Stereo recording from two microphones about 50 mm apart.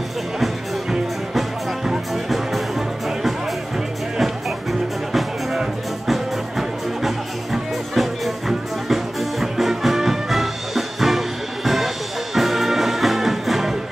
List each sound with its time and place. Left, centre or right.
2.2 s music: centre
7.0 s music: centre